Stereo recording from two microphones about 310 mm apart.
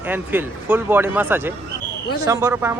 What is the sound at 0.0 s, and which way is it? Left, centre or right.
Speech, centre.